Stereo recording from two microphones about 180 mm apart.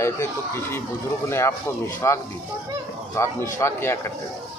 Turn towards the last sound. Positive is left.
turn(degrees=15)  # may be behind; listen again after turning